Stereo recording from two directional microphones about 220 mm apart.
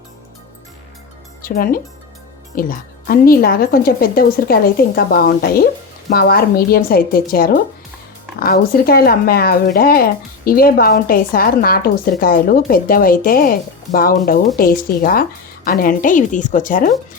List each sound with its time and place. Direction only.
1.4 s a woman's voice: 40° left (ahead or behind)